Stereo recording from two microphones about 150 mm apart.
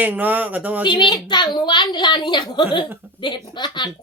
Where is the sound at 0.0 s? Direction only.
10° right (ahead or behind).